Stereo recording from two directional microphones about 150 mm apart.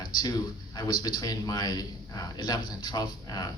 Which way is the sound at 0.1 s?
25° left (ahead or behind).